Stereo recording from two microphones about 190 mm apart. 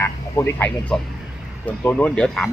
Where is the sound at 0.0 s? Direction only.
15° left (ahead or behind).